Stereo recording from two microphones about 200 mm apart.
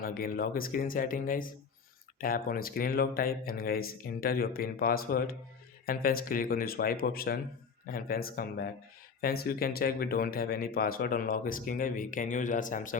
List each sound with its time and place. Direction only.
0.0 s speech: 45° left (ahead or behind)